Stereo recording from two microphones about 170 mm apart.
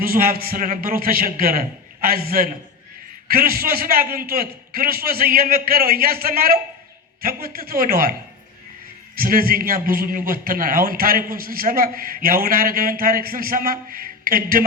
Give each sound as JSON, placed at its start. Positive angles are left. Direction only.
{"t": 0.0, "sound": "a man's voice", "side_deg": -60}
{"t": 9.1, "sound": "a man's voice", "side_deg": -60}